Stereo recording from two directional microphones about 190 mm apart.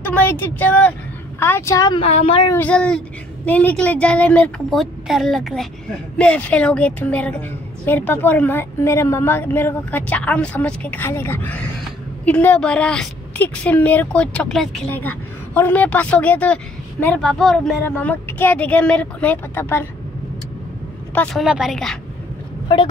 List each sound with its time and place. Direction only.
0.3 s a woman's voice: 10° left (ahead or behind)
2.0 s a woman's voice: 35° left (ahead or behind)
2.5 s a woman's voice: 5° left (ahead or behind)
21.1 s a woman's voice: 5° left (ahead or behind)
22.7 s speech: 25° left (ahead or behind)